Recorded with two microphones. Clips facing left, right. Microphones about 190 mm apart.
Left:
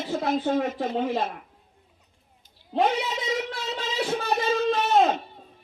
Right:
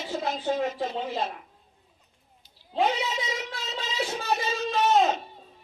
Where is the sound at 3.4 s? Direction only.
50° left (ahead or behind).